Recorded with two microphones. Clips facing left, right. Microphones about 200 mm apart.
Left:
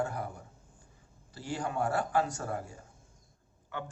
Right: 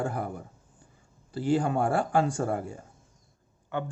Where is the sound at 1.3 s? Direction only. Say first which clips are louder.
Right 9 dB; 30° right (ahead or behind).